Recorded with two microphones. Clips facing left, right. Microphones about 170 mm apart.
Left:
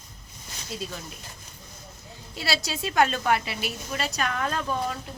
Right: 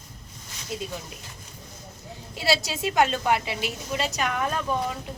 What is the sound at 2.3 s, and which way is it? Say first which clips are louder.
A woman's voice: right 4 dB; 15° right (ahead or behind).